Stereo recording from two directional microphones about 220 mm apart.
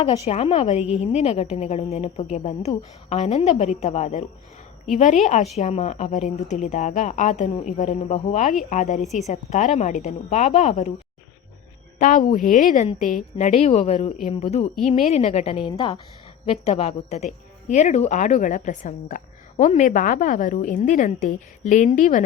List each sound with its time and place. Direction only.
0.0 s a woman's voice: 30° left (ahead or behind)
11.9 s a woman's voice: 35° left (ahead or behind)